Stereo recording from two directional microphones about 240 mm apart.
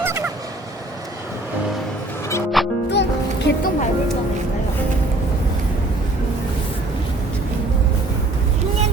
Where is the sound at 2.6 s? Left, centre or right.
Centre.